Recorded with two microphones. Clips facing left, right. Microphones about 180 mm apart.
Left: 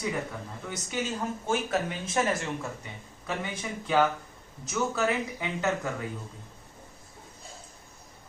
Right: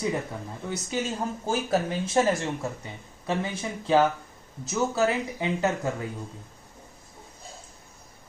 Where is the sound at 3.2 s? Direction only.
30° right (ahead or behind).